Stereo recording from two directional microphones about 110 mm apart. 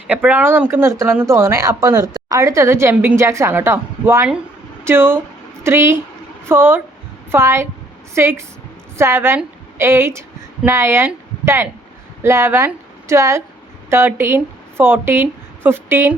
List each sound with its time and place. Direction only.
0.1 s speech: 15° right (ahead or behind)
2.9 s a woman's voice: 10° right (ahead or behind)
3.2 s a woman's voice: 25° right (ahead or behind)